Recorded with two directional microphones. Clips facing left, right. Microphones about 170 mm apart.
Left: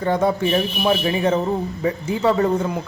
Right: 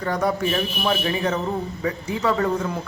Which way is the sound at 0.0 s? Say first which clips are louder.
Left 4 dB; 25° left (ahead or behind).